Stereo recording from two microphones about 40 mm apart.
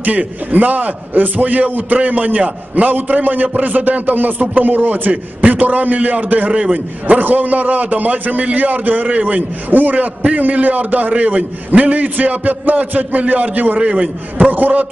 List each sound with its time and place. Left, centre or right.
0.5 s a man's voice: right
5.1 s a man's voice: right
9.7 s a man's voice: right
13.7 s a man's voice: right